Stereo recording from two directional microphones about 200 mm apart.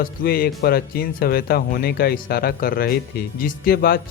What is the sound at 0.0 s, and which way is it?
Speech, 45° left (ahead or behind).